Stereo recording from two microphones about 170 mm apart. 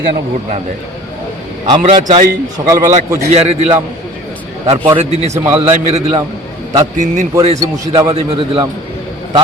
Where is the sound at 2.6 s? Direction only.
30° right (ahead or behind).